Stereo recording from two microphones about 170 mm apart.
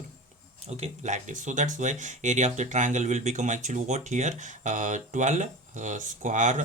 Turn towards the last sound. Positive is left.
turn(degrees=-45)  # may be behind; listen again after turning